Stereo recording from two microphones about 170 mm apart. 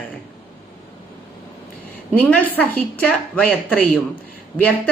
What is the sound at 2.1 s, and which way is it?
Speech, 10° left (ahead or behind).